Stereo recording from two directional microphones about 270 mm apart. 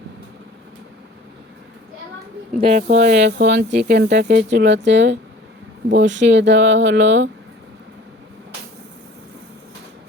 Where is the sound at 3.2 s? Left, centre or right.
Right.